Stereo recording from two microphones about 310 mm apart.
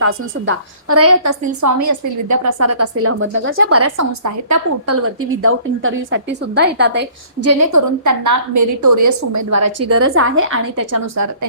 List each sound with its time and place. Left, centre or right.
0.0 s a woman's voice: right
1.6 s a woman's voice: right
7.4 s a woman's voice: right